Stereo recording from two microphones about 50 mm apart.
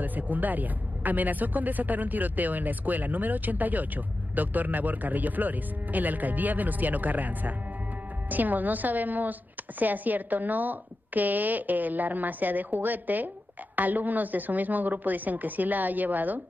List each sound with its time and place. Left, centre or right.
0.0 s speech: right